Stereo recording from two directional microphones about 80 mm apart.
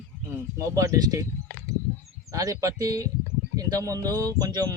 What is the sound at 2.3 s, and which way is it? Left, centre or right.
Speech, right.